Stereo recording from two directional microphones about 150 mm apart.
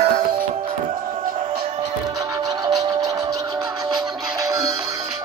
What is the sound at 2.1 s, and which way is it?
Music, 25° right (ahead or behind).